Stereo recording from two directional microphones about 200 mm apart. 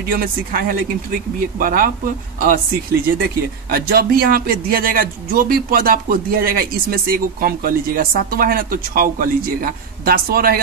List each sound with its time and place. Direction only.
0.1 s speech: 45° right (ahead or behind)